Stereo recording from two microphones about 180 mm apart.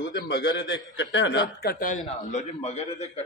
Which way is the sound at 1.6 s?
55° left (ahead or behind).